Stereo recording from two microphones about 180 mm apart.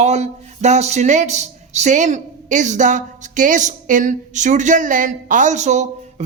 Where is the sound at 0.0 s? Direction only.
40° right (ahead or behind).